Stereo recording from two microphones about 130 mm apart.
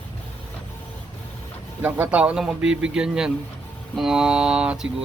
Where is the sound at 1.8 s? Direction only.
10° right (ahead or behind).